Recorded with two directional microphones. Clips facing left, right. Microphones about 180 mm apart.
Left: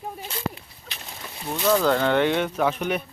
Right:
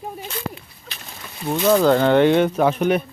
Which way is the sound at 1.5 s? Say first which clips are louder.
Right 5 dB; 35° right (ahead or behind).